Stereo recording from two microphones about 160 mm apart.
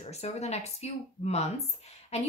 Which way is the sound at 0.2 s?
45° left (ahead or behind).